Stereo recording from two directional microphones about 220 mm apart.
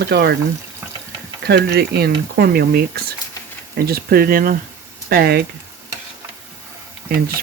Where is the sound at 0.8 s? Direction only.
5° right (ahead or behind).